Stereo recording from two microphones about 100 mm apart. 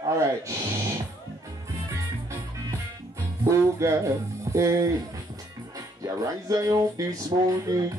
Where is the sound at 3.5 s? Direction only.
30° right (ahead or behind).